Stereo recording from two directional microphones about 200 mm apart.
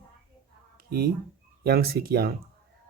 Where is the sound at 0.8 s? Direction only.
50° right (ahead or behind).